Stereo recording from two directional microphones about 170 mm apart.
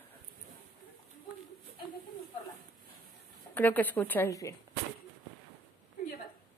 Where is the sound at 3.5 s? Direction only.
10° left (ahead or behind).